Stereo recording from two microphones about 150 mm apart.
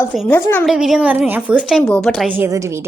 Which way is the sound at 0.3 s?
15° left (ahead or behind).